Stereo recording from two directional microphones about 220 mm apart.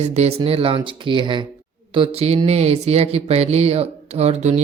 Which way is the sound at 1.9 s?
25° right (ahead or behind).